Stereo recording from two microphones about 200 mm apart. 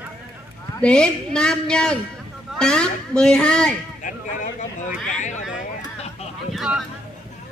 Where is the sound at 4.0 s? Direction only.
40° left (ahead or behind).